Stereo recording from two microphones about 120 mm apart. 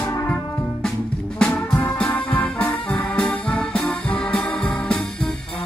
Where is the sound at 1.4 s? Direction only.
10° left (ahead or behind).